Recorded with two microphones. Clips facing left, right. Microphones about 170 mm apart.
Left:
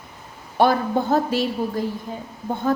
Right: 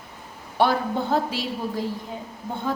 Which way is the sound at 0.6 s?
45° left (ahead or behind).